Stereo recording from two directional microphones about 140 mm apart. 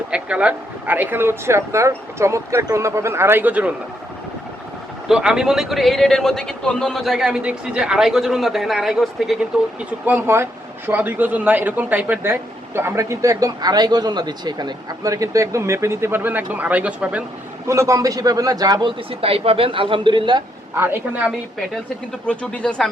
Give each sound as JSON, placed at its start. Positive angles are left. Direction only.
{"t": 0.1, "sound": "speech", "side_deg": -10}
{"t": 5.0, "sound": "a man's voice", "side_deg": -5}
{"t": 10.1, "sound": "speech", "side_deg": -15}
{"t": 17.7, "sound": "a man's voice", "side_deg": -20}
{"t": 20.7, "sound": "speech", "side_deg": -15}
{"t": 22.3, "sound": "speech", "side_deg": 10}